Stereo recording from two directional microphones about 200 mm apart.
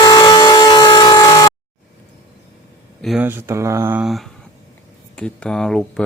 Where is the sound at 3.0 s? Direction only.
5° right (ahead or behind).